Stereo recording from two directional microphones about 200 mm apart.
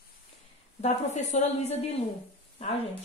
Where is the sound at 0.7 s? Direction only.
35° left (ahead or behind).